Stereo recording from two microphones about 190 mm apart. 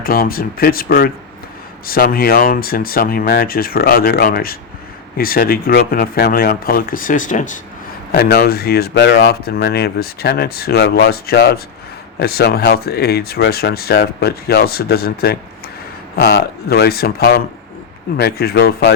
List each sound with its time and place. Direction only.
0.0 s speech: 50° left (ahead or behind)
8.1 s speech: 55° left (ahead or behind)